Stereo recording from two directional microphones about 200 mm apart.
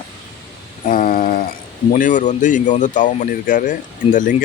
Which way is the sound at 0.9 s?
45° left (ahead or behind).